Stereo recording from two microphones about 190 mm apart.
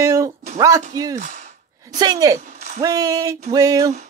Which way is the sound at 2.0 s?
20° right (ahead or behind).